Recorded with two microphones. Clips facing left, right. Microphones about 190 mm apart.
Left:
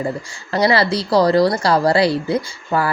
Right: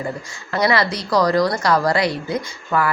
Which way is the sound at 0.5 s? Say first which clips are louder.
Left 3 dB; 30° left (ahead or behind).